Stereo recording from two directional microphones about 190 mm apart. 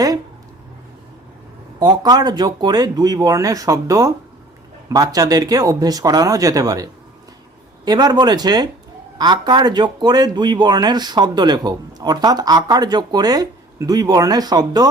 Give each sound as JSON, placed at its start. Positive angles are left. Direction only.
{"t": 1.8, "sound": "speech", "side_deg": -20}